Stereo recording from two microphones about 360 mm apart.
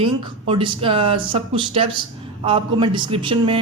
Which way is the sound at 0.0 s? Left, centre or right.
Centre.